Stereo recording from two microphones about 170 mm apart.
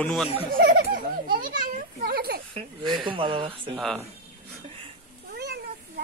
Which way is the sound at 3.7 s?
5° left (ahead or behind).